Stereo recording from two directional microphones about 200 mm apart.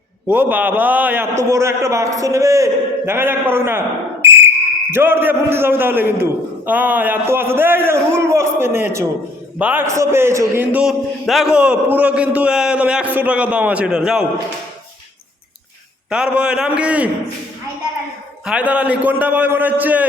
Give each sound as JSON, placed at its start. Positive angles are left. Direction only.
{"t": 0.3, "sound": "a man's voice", "side_deg": -10}
{"t": 16.0, "sound": "a man's voice", "side_deg": -5}
{"t": 18.4, "sound": "a man's voice", "side_deg": -5}